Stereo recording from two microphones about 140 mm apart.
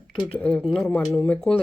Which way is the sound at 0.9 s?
10° left (ahead or behind).